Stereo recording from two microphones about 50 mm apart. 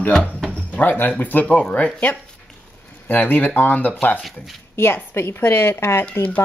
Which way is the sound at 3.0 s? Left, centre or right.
Left.